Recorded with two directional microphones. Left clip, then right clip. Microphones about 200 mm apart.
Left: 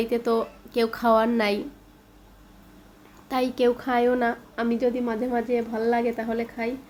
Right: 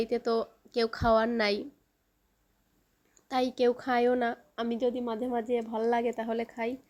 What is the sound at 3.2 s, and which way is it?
A woman's voice, 30° right (ahead or behind).